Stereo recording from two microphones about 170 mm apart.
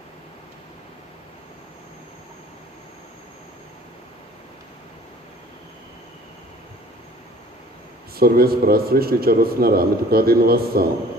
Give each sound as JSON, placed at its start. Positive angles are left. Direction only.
{"t": 8.1, "sound": "a man's voice", "side_deg": -60}